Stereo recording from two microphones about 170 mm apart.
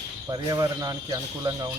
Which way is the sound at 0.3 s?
20° right (ahead or behind).